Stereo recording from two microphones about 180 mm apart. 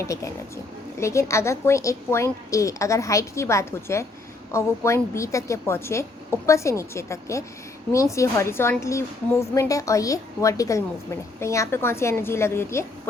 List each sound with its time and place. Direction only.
0.0 s a woman's voice: 15° left (ahead or behind)